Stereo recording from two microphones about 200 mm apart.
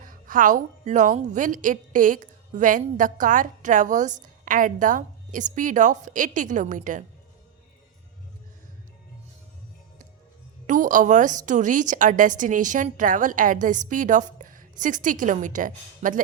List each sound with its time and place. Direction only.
0.0 s a woman's voice: 45° right (ahead or behind)
10.7 s a woman's voice: 40° right (ahead or behind)